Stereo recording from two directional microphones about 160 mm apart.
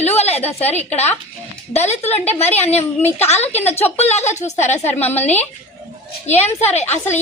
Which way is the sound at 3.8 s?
40° left (ahead or behind).